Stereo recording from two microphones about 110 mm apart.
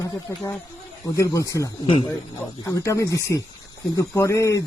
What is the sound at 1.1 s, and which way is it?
Speech, 30° left (ahead or behind).